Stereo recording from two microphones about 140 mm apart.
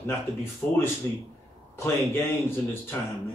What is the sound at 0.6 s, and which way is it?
Speech, 15° left (ahead or behind).